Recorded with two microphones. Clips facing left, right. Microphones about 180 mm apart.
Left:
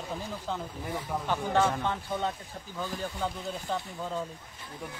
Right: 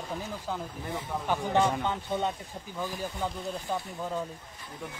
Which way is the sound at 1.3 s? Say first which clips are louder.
Right 1 dB; 15° right (ahead or behind).